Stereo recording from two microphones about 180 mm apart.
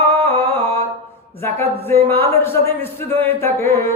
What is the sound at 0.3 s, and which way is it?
Mantra, 35° right (ahead or behind).